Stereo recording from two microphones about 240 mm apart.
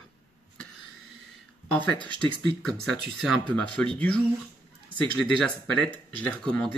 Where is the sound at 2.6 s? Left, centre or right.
Centre.